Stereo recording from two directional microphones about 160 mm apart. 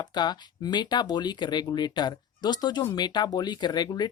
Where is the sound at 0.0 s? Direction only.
25° left (ahead or behind).